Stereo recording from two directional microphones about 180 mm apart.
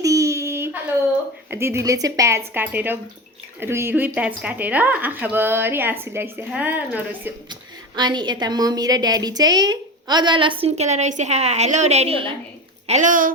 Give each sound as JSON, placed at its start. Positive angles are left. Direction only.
{"t": 0.0, "sound": "a sound", "side_deg": -15}
{"t": 1.5, "sound": "a woman's voice", "side_deg": -15}
{"t": 7.9, "sound": "a woman's voice", "side_deg": -25}
{"t": 12.9, "sound": "speech", "side_deg": -45}